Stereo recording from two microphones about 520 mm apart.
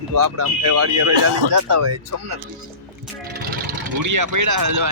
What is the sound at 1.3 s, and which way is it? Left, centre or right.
Speech, right.